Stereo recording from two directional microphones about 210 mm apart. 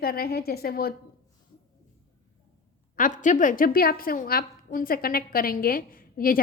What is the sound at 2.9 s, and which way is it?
A woman's voice, 40° left (ahead or behind).